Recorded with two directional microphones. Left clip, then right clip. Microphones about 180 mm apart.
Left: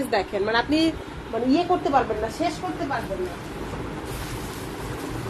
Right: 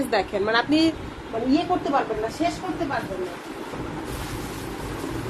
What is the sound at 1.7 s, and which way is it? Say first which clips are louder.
Speech: left 1 dB; 45° left (ahead or behind).